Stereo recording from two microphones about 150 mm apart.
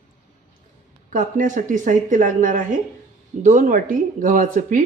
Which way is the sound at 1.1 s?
60° right (ahead or behind).